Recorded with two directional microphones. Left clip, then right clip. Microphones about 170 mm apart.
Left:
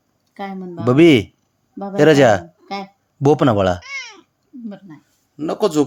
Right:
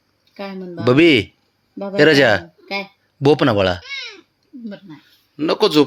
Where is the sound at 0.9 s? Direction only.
15° left (ahead or behind).